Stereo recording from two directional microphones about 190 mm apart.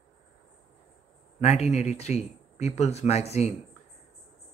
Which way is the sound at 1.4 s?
35° left (ahead or behind).